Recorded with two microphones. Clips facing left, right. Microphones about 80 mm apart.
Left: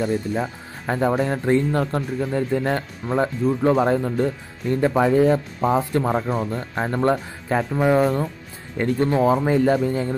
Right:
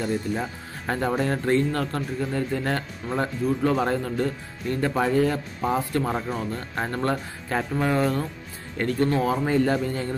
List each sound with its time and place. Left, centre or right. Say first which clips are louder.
0.0 s speech: left 4 dB; centre